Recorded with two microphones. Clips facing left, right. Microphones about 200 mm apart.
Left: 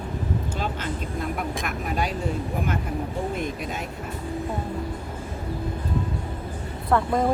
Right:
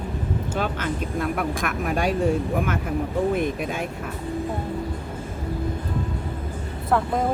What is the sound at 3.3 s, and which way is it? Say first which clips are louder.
Speech: right 5 dB; 55° right (ahead or behind).